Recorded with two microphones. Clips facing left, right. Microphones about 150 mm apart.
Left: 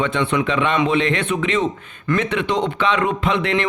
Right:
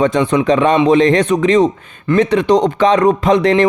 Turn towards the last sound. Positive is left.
turn(degrees=-35)  # may be behind; listen again after turning